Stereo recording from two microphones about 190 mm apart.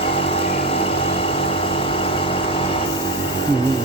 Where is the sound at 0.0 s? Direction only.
30° left (ahead or behind).